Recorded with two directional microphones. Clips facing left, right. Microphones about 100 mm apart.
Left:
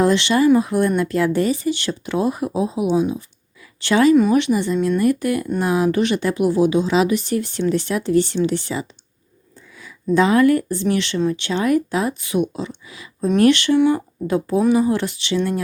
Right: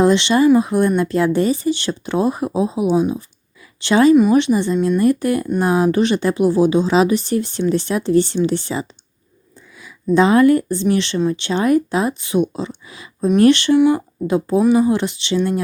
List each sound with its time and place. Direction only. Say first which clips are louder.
0.0 s speech: right 2 dB; 25° right (ahead or behind)
10.2 s speech: right 3 dB; 25° right (ahead or behind)
13.7 s speech: right 2 dB; 15° right (ahead or behind)